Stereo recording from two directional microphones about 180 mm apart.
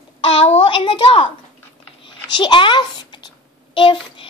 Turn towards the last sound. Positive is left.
turn(degrees=30)  # may be behind; listen again after turning